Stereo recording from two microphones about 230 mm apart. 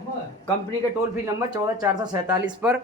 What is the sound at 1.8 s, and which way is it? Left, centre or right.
Speech, centre.